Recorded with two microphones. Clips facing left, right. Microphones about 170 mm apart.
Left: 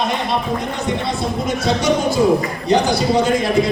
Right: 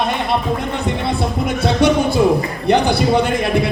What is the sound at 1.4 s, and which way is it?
Speech, 60° right (ahead or behind).